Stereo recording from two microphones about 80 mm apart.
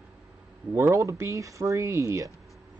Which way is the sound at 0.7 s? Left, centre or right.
Right.